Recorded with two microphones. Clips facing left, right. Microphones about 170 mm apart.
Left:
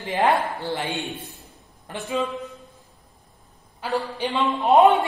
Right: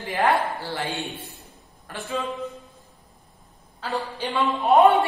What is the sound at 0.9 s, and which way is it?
Speech, centre (ahead or behind).